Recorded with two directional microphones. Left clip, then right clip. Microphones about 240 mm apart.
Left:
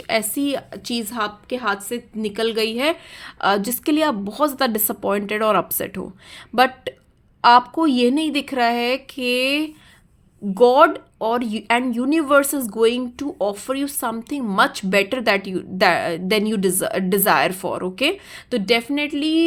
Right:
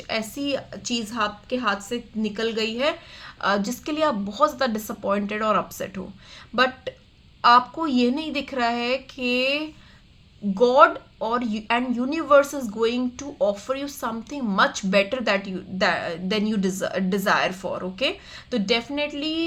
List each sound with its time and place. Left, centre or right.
0.1 s speech: left
7.4 s speech: left